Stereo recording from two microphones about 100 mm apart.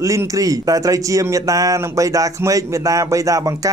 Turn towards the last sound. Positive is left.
turn(degrees=-35)  # may be behind; listen again after turning